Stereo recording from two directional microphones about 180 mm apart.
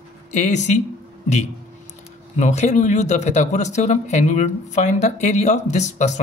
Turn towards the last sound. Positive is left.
turn(degrees=40)  # may be behind; listen again after turning